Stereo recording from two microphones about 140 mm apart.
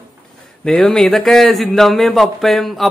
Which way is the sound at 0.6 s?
5° left (ahead or behind).